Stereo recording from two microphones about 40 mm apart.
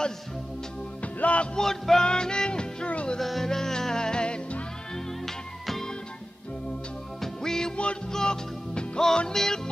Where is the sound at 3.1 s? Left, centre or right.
Centre.